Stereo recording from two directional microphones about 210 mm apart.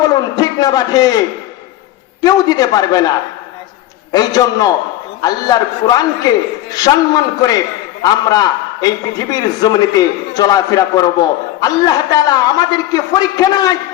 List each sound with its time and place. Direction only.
0.0 s a man's voice: 20° left (ahead or behind)
2.2 s a man's voice: 20° left (ahead or behind)
4.1 s a man's voice: 20° left (ahead or behind)